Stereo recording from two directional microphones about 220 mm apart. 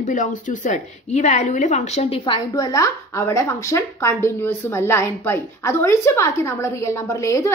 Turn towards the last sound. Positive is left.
turn(degrees=15)  # may be behind; listen again after turning